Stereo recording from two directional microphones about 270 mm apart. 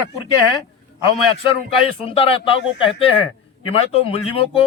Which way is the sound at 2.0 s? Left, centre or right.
Left.